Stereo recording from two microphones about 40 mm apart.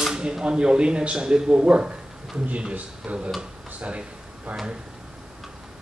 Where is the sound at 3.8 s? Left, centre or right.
Right.